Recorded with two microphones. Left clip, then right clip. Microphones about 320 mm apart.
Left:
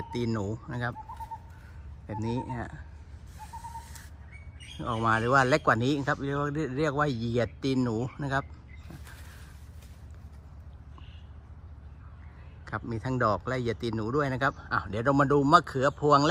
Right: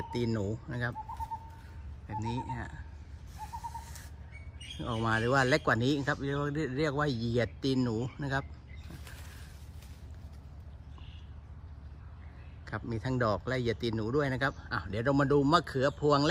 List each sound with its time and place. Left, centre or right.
0.1 s speech: centre
2.0 s speech: centre
3.7 s owl: centre
4.8 s speech: centre
8.9 s a sound: centre
12.6 s speech: centre